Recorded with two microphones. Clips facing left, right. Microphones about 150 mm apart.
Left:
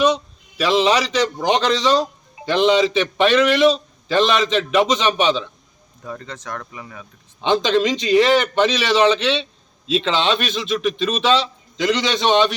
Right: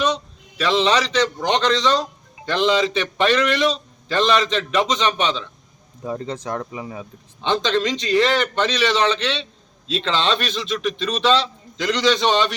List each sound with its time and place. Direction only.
0.0 s a man's voice: 10° left (ahead or behind)
6.0 s speech: 25° right (ahead or behind)
7.4 s a man's voice: 10° left (ahead or behind)